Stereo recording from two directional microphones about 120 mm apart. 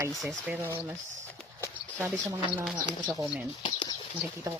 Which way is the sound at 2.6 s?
Centre (ahead or behind).